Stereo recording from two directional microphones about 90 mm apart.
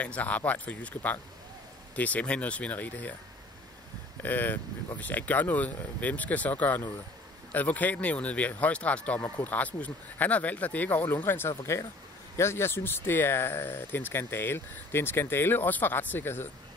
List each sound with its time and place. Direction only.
0.0 s speech: 15° left (ahead or behind)
4.2 s speech: 20° left (ahead or behind)